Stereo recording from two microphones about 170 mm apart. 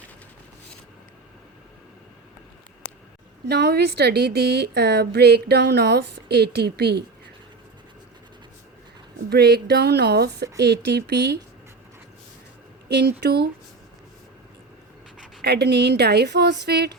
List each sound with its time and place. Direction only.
3.4 s speech: 70° right (ahead or behind)
9.3 s speech: 75° right (ahead or behind)
12.9 s speech: 75° right (ahead or behind)
15.4 s speech: 75° right (ahead or behind)